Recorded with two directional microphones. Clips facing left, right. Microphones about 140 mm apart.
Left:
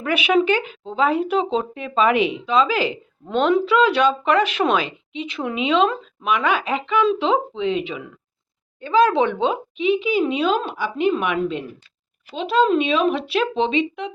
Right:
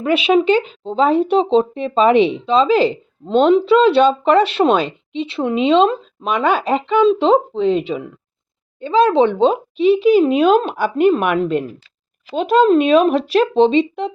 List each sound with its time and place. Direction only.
0.0 s speech: 25° right (ahead or behind)
8.8 s speech: 20° right (ahead or behind)